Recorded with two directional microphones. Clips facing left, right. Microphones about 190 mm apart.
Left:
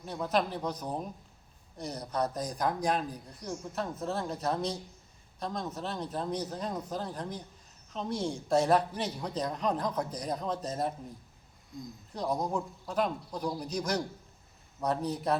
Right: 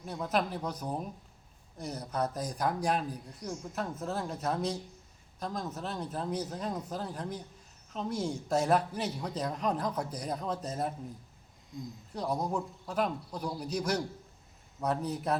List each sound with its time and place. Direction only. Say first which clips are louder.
0.0 s a man's voice: left 1 dB; 5° right (ahead or behind)
12.1 s a man's voice: left 1 dB; 5° right (ahead or behind)